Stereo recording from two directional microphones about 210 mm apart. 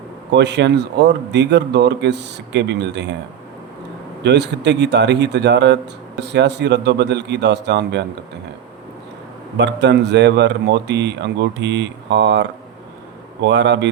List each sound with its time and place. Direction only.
0.3 s speech: 55° right (ahead or behind)
4.2 s speech: 55° right (ahead or behind)
9.6 s speech: 55° right (ahead or behind)